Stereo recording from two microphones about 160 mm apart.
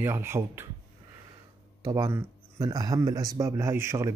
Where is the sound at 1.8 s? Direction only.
20° right (ahead or behind).